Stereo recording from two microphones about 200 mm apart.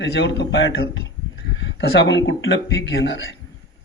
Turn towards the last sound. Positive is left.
turn(degrees=65)  # may be behind; listen again after turning